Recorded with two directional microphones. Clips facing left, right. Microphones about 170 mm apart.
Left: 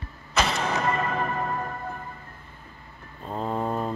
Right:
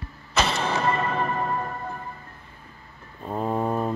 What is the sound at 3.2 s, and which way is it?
Mantra, 10° right (ahead or behind).